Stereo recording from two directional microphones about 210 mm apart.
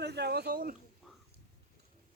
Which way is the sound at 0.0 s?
50° right (ahead or behind).